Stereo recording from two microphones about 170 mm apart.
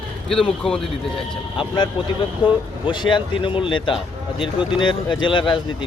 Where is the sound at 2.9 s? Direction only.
30° left (ahead or behind).